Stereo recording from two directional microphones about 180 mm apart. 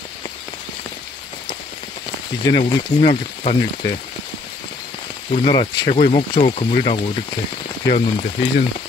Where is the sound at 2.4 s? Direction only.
20° left (ahead or behind).